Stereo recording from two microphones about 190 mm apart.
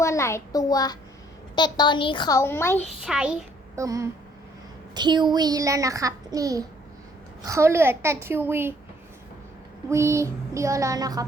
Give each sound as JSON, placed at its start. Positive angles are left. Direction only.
{"t": 0.0, "sound": "a child's voice", "side_deg": 15}
{"t": 3.0, "sound": "a child's voice", "side_deg": -5}
{"t": 3.8, "sound": "child singing", "side_deg": -15}
{"t": 4.9, "sound": "a child's voice", "side_deg": -25}
{"t": 7.4, "sound": "child singing", "side_deg": -15}
{"t": 9.9, "sound": "child singing", "side_deg": -15}